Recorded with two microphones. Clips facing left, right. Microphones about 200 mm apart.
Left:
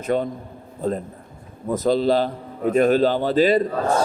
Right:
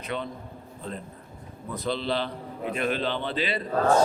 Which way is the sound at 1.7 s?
45° left (ahead or behind).